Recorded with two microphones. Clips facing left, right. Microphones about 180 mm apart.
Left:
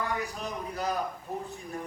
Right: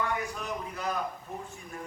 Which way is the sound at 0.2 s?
35° left (ahead or behind).